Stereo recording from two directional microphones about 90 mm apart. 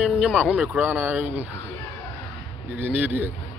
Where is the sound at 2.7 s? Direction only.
20° right (ahead or behind).